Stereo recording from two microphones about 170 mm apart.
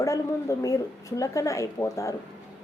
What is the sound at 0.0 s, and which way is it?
Speech, 20° left (ahead or behind).